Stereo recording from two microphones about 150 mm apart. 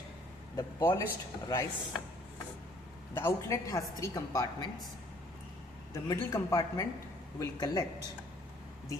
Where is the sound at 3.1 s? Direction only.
20° left (ahead or behind).